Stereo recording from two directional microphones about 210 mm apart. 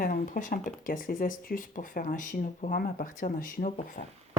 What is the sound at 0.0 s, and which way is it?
Speech, 40° left (ahead or behind).